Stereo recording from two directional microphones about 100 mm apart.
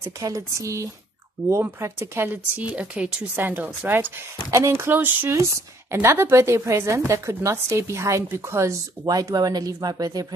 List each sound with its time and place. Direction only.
0.0 s speech: 35° right (ahead or behind); by 4.1 s 20° right (ahead or behind)
4.5 s speech: 30° right (ahead or behind)